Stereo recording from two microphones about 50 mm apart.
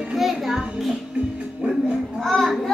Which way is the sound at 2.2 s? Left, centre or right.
Centre.